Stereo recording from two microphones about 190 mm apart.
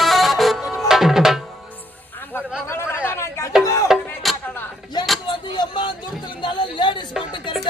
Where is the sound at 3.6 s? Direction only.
15° left (ahead or behind).